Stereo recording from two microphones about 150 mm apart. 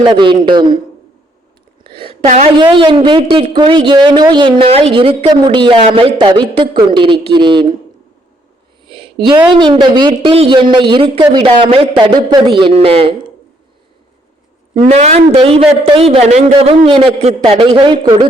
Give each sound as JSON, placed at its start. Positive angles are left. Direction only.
{"t": 0.0, "sound": "speech", "side_deg": -30}
{"t": 1.8, "sound": "a sound", "side_deg": -35}
{"t": 2.6, "sound": "speech", "side_deg": -35}
{"t": 8.9, "sound": "a sound", "side_deg": -35}
{"t": 9.6, "sound": "speech", "side_deg": -30}
{"t": 14.8, "sound": "speech", "side_deg": -45}